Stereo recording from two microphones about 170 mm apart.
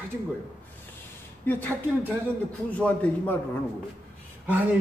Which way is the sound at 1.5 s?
10° left (ahead or behind).